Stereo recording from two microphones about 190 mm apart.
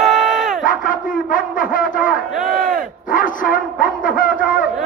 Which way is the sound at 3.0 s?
45° left (ahead or behind).